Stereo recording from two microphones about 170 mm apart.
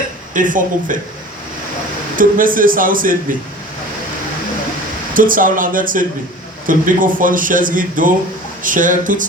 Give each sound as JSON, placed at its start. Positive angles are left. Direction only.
{"t": 0.3, "sound": "speech", "side_deg": -50}
{"t": 2.1, "sound": "speech", "side_deg": -55}
{"t": 5.1, "sound": "speech", "side_deg": -55}